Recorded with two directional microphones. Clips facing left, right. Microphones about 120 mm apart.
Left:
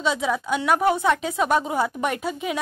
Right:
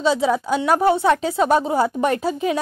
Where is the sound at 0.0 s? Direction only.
35° right (ahead or behind).